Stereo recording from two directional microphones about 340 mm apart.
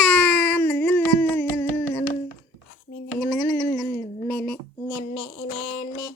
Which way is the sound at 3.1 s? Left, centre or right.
Centre.